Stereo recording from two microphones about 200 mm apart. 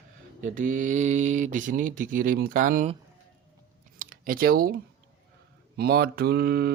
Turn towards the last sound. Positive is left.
turn(degrees=-50)  # may be behind; listen again after turning